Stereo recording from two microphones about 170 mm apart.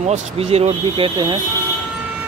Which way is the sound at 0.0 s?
40° right (ahead or behind).